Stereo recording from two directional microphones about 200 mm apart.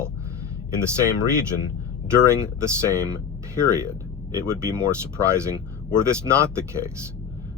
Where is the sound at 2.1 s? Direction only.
15° right (ahead or behind).